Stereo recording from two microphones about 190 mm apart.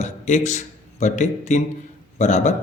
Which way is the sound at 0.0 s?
40° left (ahead or behind).